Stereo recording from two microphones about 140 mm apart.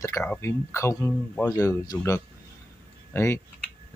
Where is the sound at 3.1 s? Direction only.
20° left (ahead or behind).